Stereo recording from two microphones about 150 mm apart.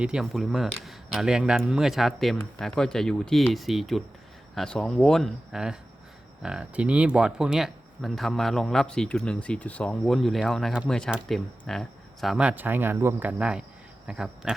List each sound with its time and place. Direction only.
0.0 s speech: 5° right (ahead or behind)